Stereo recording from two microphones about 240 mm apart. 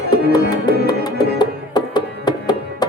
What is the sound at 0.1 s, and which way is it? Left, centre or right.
Music, centre.